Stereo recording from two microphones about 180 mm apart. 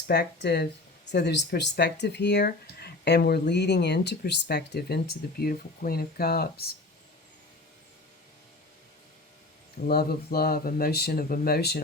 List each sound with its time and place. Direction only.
0.1 s speech: 65° left (ahead or behind)
9.8 s speech: 55° left (ahead or behind)